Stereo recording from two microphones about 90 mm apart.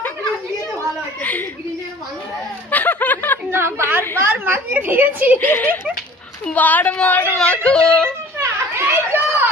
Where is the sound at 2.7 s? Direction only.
20° left (ahead or behind).